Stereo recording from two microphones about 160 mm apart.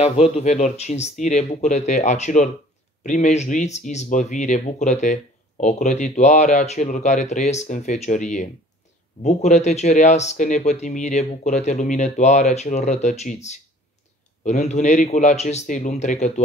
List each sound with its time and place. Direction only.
0.0 s speech: 45° left (ahead or behind)